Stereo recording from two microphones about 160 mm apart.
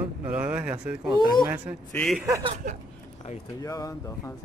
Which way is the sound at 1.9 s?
5° left (ahead or behind).